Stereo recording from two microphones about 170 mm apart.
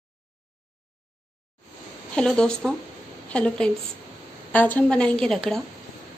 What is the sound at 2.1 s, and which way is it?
A woman's voice, 5° left (ahead or behind).